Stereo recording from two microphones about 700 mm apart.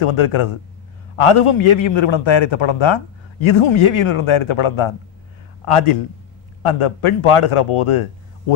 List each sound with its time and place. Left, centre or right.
0.0 s a man's voice: left